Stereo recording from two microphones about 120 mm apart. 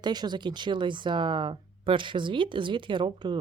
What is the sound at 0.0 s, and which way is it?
Speech, 35° right (ahead or behind).